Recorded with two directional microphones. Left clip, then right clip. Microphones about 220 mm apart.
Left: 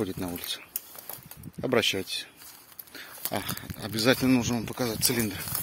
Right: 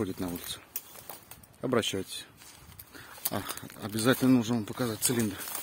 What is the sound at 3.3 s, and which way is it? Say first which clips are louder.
Speech: left 4 dB; 5° right (ahead or behind).